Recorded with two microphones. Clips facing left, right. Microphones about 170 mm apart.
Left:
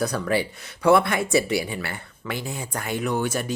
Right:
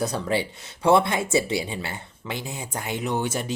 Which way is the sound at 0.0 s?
25° right (ahead or behind).